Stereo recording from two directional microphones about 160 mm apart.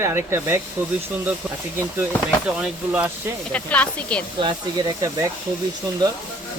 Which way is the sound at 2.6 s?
5° right (ahead or behind).